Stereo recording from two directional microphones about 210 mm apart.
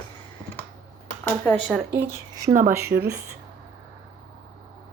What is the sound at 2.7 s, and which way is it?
Speech, 10° right (ahead or behind).